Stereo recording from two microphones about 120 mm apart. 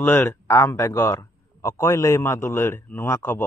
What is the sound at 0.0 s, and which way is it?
A man's voice, 20° left (ahead or behind).